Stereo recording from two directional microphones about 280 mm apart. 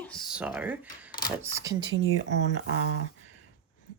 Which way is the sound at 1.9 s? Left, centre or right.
Right.